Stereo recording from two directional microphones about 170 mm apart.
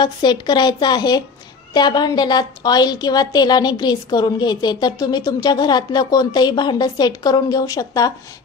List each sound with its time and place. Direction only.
0.0 s a woman's voice: 25° left (ahead or behind)